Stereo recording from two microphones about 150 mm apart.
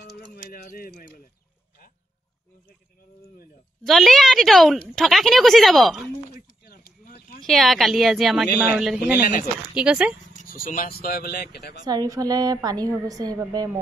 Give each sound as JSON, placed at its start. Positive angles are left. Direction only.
{"t": 0.2, "sound": "a sound", "side_deg": 85}
{"t": 3.8, "sound": "a woman's voice", "side_deg": 0}
{"t": 6.3, "sound": "a sound", "side_deg": 90}
{"t": 7.4, "sound": "a woman's voice", "side_deg": 0}
{"t": 10.4, "sound": "speech", "side_deg": 65}
{"t": 11.8, "sound": "a woman's voice", "side_deg": -25}